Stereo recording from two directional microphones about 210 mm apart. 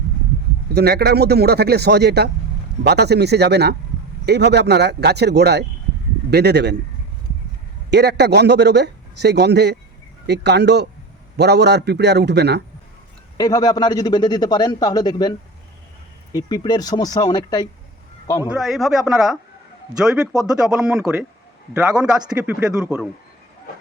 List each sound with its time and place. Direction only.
0.7 s a man's voice: 50° right (ahead or behind)
7.9 s a man's voice: 50° right (ahead or behind)
13.3 s a man's voice: 20° left (ahead or behind)
16.3 s a man's voice: 20° left (ahead or behind)
18.4 s speech: centre (ahead or behind)